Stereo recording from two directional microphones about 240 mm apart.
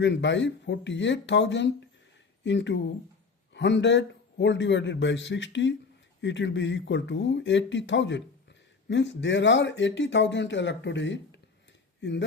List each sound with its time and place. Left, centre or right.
0.0 s speech: left